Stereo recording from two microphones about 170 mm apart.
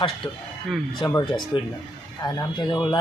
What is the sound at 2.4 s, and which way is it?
Speech, 25° left (ahead or behind).